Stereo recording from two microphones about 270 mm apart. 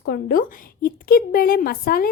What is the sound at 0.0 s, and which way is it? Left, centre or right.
A woman's voice, left.